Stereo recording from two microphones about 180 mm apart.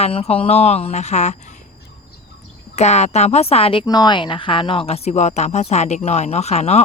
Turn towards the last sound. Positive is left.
turn(degrees=35)  # may be behind; listen again after turning